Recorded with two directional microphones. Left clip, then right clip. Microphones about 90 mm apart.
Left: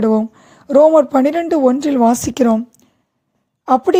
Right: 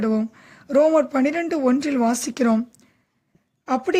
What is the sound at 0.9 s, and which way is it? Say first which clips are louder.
Speech: left 7 dB; 45° left (ahead or behind).